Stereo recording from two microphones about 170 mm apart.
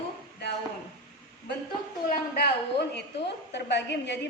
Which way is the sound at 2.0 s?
75° left (ahead or behind).